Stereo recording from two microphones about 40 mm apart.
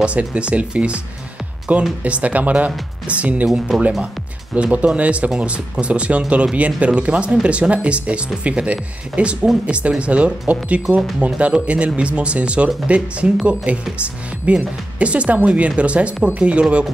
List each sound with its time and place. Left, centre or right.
0.0 s speech: right
3.7 s speech: centre
4.6 s speech: right